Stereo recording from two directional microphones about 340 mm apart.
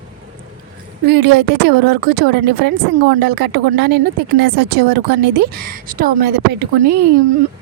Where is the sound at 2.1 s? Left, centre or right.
Right.